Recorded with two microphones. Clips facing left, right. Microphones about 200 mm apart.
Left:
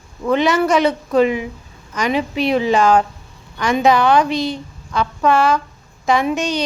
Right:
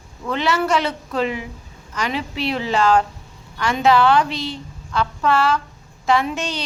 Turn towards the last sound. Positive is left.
turn(degrees=15)  # may be behind; listen again after turning